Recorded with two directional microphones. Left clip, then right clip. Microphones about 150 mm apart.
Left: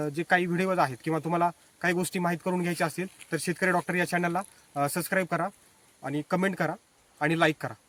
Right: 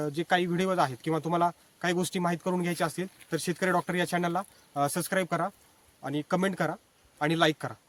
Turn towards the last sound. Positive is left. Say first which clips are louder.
# left 1 dB
turn(degrees=10)  # may be behind; listen again after turning